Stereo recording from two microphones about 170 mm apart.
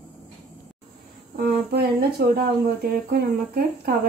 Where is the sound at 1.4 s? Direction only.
60° right (ahead or behind).